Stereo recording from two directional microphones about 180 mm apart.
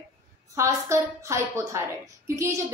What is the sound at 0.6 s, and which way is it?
A woman's voice, 15° right (ahead or behind).